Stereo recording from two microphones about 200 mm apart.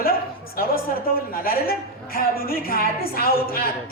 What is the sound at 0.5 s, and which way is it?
A woman's voice, 45° left (ahead or behind).